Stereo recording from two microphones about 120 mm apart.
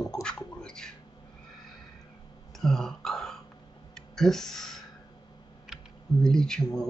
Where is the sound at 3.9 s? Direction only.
5° left (ahead or behind).